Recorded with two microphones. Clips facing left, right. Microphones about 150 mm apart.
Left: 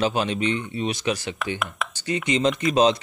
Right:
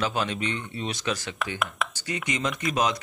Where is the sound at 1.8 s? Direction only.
Centre (ahead or behind).